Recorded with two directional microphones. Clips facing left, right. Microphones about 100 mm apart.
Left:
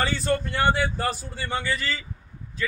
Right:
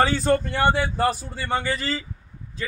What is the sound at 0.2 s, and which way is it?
Speech, 25° right (ahead or behind).